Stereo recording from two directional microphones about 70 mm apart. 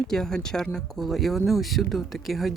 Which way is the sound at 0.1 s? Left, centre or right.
Centre.